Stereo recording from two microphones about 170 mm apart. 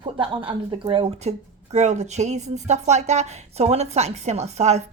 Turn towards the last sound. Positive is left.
turn(degrees=-40)  # may be behind; listen again after turning